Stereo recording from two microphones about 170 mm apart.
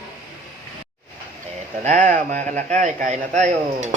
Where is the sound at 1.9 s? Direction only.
45° right (ahead or behind).